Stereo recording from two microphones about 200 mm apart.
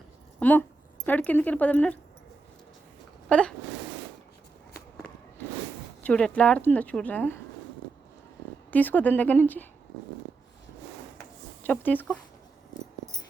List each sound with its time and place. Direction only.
0.3 s a woman's voice: 10° left (ahead or behind)
3.2 s speech: 5° left (ahead or behind)
6.0 s a woman's voice: 5° left (ahead or behind)
8.7 s a woman's voice: 10° left (ahead or behind)
11.6 s a woman's voice: 10° left (ahead or behind)